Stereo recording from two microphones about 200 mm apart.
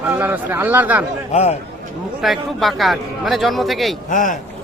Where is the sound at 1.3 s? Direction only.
35° left (ahead or behind).